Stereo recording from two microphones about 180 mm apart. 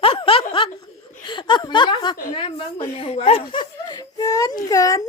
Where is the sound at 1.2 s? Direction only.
25° left (ahead or behind).